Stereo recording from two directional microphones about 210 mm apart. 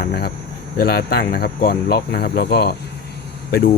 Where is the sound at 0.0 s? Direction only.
50° left (ahead or behind).